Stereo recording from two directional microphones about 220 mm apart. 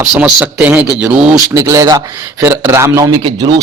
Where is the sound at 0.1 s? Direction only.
5° right (ahead or behind).